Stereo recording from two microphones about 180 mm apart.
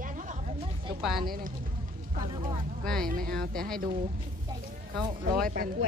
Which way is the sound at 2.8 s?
5° left (ahead or behind).